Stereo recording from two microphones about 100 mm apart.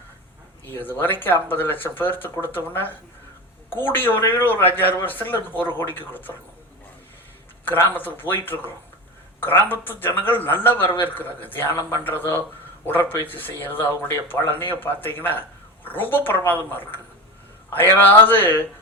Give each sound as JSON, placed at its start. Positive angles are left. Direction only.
{"t": 0.7, "sound": "speech", "side_deg": 20}
{"t": 3.8, "sound": "speech", "side_deg": 20}
{"t": 7.7, "sound": "speech", "side_deg": 20}